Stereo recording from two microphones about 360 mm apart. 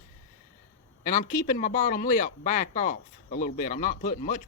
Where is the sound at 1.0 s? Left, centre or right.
Left.